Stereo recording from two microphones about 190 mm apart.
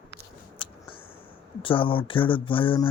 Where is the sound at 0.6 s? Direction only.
25° left (ahead or behind).